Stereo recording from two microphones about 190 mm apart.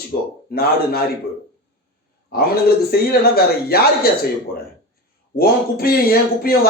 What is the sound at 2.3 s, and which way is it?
Speech, 55° left (ahead or behind).